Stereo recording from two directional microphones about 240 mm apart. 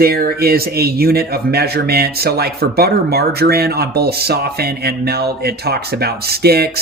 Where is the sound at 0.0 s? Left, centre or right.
Right.